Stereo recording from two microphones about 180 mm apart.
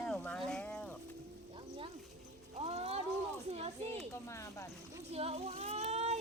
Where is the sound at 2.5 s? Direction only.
35° right (ahead or behind).